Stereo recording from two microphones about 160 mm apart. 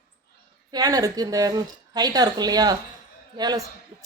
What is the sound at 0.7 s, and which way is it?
A woman's voice, 25° right (ahead or behind).